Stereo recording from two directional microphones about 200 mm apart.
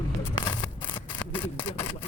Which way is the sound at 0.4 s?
25° left (ahead or behind).